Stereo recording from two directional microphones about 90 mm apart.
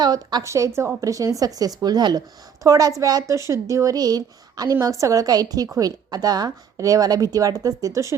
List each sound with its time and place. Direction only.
0.0 s a woman's voice: 50° right (ahead or behind)
0.4 s a woman's voice: 35° right (ahead or behind)